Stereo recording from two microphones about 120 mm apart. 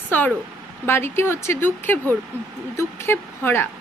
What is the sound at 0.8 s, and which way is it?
Speech, 20° left (ahead or behind).